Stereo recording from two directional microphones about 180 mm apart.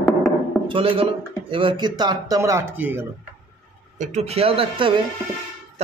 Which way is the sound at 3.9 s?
40° right (ahead or behind).